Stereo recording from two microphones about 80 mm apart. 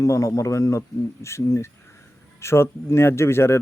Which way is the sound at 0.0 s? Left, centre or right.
Left.